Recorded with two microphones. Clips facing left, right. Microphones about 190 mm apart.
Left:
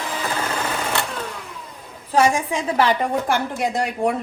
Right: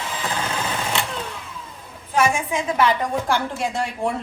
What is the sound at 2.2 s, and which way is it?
Speech, 35° left (ahead or behind).